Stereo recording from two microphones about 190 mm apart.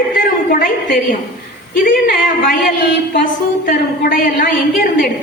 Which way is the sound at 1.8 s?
50° left (ahead or behind).